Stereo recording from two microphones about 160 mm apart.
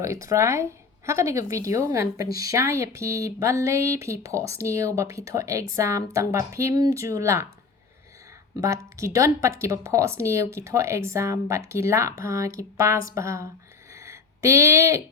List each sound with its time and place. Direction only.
0.0 s a woman's voice: 20° right (ahead or behind)
8.6 s speech: 20° right (ahead or behind)
13.9 s a sound: 20° right (ahead or behind)